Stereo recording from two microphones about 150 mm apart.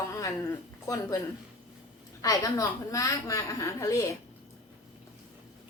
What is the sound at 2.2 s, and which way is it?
A woman's voice, 25° left (ahead or behind).